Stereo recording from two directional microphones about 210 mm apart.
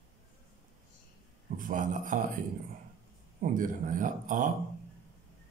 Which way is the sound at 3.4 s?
40° right (ahead or behind).